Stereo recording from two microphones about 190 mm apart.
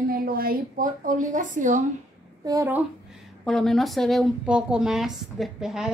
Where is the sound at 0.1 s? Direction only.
50° right (ahead or behind).